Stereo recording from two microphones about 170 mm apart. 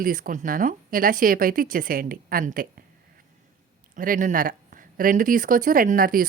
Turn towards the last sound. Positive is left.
turn(degrees=-55)  # may be behind; listen again after turning